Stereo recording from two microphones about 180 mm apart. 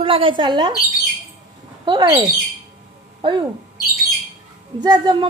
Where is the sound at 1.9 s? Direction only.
20° right (ahead or behind).